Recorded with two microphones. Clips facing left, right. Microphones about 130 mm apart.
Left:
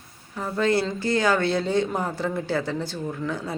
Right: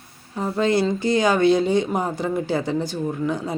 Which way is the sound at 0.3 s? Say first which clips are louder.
Right 3 dB; 25° right (ahead or behind).